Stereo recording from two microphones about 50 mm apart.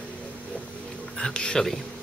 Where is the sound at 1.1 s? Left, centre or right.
Centre.